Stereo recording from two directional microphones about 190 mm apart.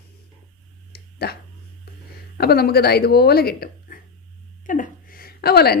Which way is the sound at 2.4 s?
55° left (ahead or behind).